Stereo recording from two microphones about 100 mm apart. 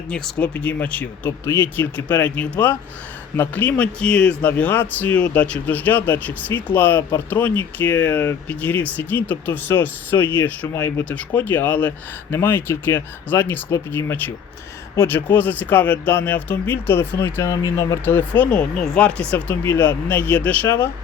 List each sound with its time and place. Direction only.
0.1 s speech: 15° left (ahead or behind); by 18.0 s 35° left (ahead or behind)
18.0 s speech: 20° left (ahead or behind)
19.6 s speech: 25° left (ahead or behind)
20.7 s speech: 25° left (ahead or behind)